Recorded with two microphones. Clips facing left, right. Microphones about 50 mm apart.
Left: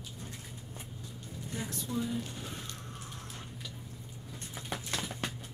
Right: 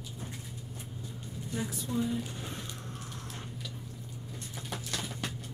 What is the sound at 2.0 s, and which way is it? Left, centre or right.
Speech, centre.